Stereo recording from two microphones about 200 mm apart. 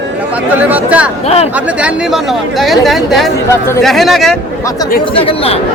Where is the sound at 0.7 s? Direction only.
10° right (ahead or behind).